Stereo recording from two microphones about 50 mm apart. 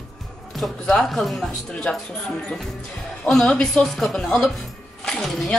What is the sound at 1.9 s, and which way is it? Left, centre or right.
Speech, centre.